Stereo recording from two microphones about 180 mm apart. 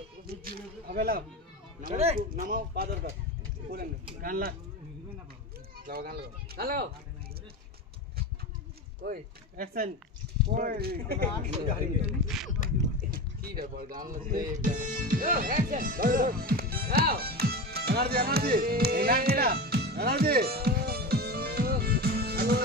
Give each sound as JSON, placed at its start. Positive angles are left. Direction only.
{"t": 0.3, "sound": "speech", "side_deg": -55}
{"t": 1.9, "sound": "speech", "side_deg": -30}
{"t": 5.9, "sound": "speech", "side_deg": -60}
{"t": 9.0, "sound": "speech", "side_deg": -55}
{"t": 12.6, "sound": "a sound", "side_deg": -60}
{"t": 14.5, "sound": "music", "side_deg": -45}